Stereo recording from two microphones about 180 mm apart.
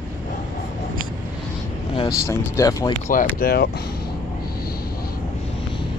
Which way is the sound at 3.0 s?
45° left (ahead or behind).